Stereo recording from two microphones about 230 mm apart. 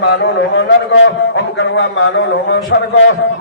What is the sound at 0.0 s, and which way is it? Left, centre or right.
A man's voice, left.